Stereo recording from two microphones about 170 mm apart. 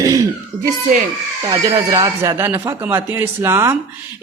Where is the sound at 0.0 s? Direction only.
20° right (ahead or behind).